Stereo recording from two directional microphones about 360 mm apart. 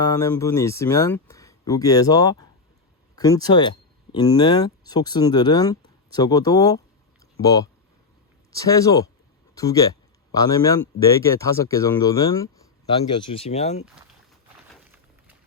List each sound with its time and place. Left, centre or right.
0.0 s speech: centre